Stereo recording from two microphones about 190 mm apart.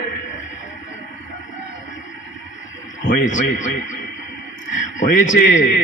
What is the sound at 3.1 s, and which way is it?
Speech, 40° left (ahead or behind).